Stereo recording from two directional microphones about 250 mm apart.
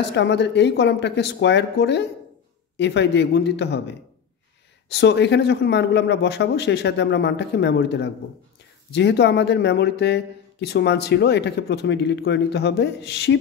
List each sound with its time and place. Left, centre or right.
0.1 s speech: left